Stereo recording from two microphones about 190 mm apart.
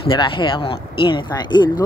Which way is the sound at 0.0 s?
25° left (ahead or behind).